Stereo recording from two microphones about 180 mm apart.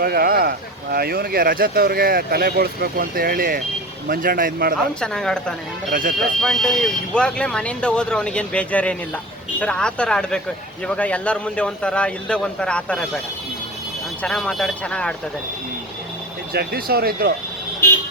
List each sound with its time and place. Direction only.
0.0 s speech: 55° right (ahead or behind)
4.9 s speech: 5° left (ahead or behind)
5.9 s speech: 55° right (ahead or behind)
6.4 s speech: centre (ahead or behind)
14.2 s speech: 5° left (ahead or behind)
16.5 s speech: 60° right (ahead or behind)
17.8 s vehicle: 15° left (ahead or behind)